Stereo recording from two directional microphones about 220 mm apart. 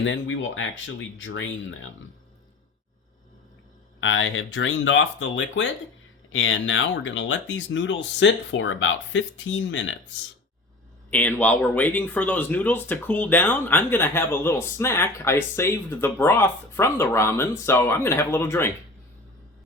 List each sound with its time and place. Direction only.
0.0 s speech: 55° left (ahead or behind)
4.0 s speech: 55° left (ahead or behind)
11.1 s speech: 5° left (ahead or behind)